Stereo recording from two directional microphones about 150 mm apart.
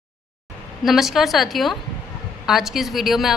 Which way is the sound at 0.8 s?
Centre (ahead or behind).